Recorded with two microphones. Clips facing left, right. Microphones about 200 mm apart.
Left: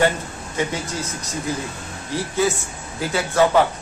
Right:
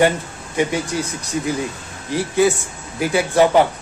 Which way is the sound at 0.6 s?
15° right (ahead or behind).